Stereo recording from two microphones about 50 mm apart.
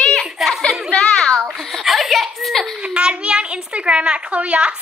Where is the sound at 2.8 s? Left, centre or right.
Centre.